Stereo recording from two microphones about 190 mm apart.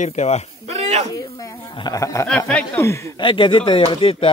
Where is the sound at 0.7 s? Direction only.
35° right (ahead or behind).